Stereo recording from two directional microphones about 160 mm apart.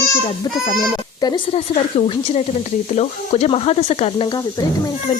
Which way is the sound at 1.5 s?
40° left (ahead or behind).